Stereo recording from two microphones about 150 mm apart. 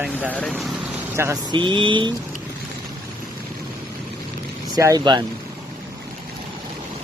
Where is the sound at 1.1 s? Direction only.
20° right (ahead or behind).